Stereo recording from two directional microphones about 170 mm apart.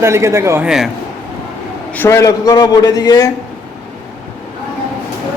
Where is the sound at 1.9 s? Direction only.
15° left (ahead or behind).